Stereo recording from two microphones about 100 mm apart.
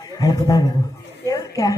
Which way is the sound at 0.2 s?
35° left (ahead or behind).